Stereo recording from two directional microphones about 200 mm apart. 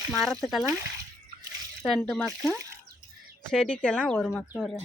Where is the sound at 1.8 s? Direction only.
Centre (ahead or behind).